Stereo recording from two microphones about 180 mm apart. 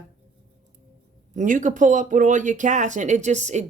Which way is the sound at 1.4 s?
45° right (ahead or behind).